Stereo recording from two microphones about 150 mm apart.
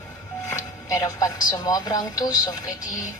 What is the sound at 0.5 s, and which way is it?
Speech, 25° left (ahead or behind).